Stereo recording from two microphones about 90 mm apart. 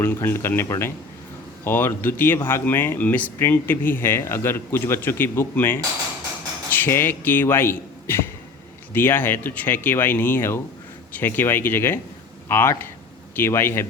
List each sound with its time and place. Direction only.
0.0 s speech: 25° left (ahead or behind)